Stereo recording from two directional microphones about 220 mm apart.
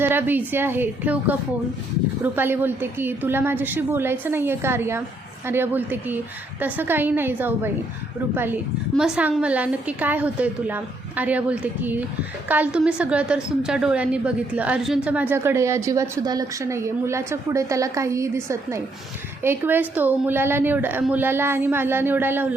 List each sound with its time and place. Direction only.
0.0 s a woman's voice: 10° right (ahead or behind)
9.0 s a woman's voice: 5° right (ahead or behind)